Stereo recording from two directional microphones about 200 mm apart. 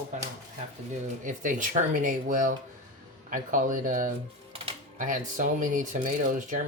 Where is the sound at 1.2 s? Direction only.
40° right (ahead or behind).